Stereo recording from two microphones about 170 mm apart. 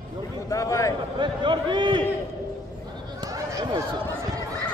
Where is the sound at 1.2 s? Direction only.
25° right (ahead or behind).